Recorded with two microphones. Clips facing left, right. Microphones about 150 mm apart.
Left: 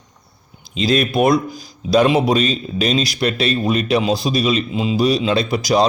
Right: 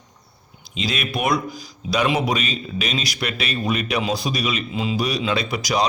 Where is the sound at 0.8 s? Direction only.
35° left (ahead or behind).